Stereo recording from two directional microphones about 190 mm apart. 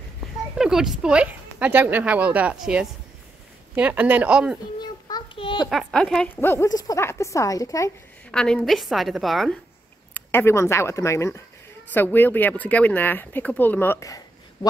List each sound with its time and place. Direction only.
0.6 s speech: centre (ahead or behind)
5.0 s child singing: 25° left (ahead or behind)
5.7 s speech: centre (ahead or behind); by 7.9 s 15° left (ahead or behind)
8.3 s a woman's voice: 5° left (ahead or behind)
10.1 s speech: 15° left (ahead or behind)